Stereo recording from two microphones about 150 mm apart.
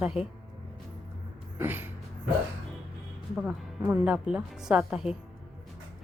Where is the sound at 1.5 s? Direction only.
15° right (ahead or behind).